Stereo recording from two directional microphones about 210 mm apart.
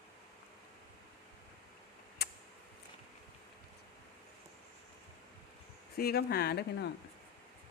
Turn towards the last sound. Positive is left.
turn(degrees=50)  # may be behind; listen again after turning